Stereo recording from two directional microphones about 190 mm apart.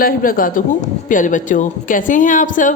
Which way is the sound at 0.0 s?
50° left (ahead or behind).